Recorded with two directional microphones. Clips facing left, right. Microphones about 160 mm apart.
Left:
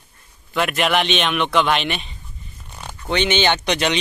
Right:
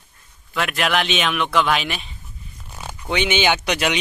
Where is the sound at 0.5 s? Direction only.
Centre (ahead or behind).